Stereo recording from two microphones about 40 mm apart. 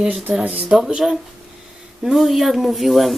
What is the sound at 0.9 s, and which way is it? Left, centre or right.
Speech, centre.